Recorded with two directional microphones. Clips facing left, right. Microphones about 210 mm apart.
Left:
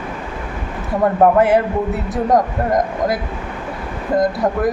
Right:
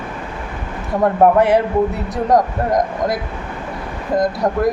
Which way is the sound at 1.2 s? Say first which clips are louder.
Even; centre (ahead or behind).